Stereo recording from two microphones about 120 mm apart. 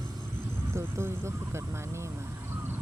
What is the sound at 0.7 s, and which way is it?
Speech, 20° right (ahead or behind).